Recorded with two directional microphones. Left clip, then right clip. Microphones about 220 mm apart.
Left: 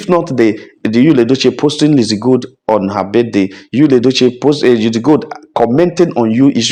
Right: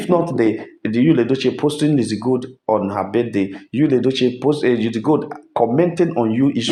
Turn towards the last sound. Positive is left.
turn(degrees=40)  # may be behind; listen again after turning